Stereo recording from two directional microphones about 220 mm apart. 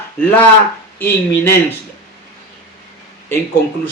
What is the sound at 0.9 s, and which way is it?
Speech, 10° left (ahead or behind).